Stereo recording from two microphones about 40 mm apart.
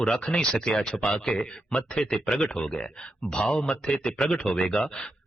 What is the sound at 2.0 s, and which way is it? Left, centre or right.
Speech, centre.